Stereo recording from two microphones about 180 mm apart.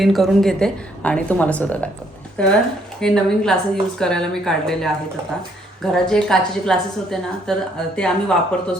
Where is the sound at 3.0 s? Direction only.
5° left (ahead or behind).